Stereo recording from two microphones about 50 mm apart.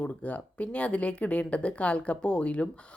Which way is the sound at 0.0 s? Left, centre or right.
Left.